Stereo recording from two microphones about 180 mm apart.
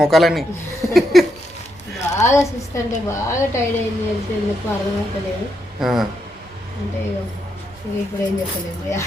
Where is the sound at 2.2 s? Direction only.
15° left (ahead or behind).